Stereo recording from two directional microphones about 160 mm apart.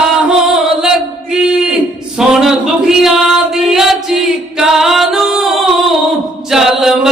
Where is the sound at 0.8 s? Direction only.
5° right (ahead or behind).